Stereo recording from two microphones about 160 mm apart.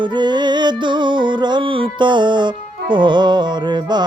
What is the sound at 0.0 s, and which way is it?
Music, 30° right (ahead or behind).